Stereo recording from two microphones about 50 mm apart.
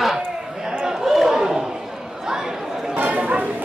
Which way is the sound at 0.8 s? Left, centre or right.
Centre.